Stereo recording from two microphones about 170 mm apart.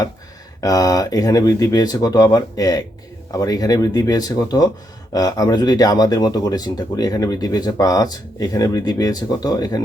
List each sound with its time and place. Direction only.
0.6 s speech: 20° left (ahead or behind)